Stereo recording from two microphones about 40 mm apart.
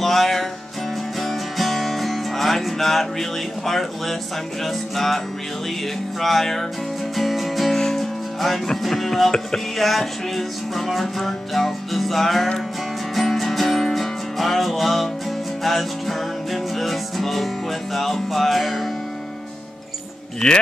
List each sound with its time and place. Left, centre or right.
0.0 s music: centre
6.2 s music: centre
7.7 s music: centre
20.4 s speech: centre